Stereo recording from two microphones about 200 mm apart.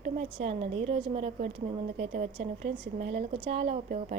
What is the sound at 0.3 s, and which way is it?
A woman's voice, 30° right (ahead or behind).